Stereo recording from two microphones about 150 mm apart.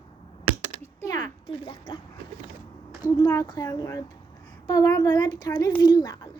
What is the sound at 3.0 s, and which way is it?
A child's voice, 25° left (ahead or behind).